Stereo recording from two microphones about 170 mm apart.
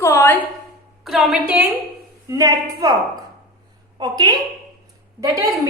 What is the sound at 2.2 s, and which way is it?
A woman's voice, 20° right (ahead or behind).